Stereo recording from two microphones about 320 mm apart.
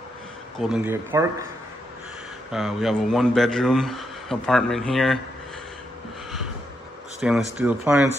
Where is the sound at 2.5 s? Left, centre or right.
Centre.